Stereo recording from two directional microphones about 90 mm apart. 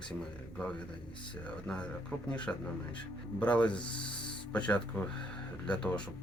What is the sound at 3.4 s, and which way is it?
Speech, 15° left (ahead or behind).